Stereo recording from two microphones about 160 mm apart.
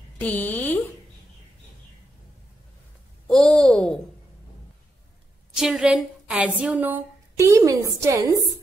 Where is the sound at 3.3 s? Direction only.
5° left (ahead or behind).